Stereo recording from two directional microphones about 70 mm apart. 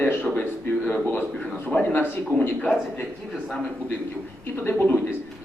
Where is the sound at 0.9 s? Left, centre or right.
Left.